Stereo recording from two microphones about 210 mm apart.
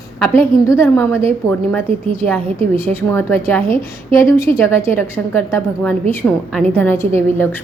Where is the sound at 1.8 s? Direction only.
25° right (ahead or behind).